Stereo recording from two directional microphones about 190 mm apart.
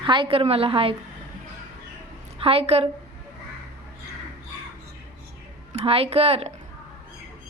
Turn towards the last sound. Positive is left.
turn(degrees=-30)  # may be behind; listen again after turning